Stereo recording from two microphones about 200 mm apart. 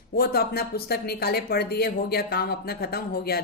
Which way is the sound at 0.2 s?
50° left (ahead or behind).